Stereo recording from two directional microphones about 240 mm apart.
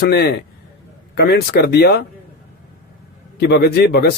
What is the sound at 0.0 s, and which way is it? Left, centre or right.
Speech, left.